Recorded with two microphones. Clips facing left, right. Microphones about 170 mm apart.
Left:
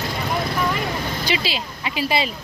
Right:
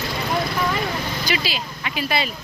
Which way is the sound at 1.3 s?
30° left (ahead or behind).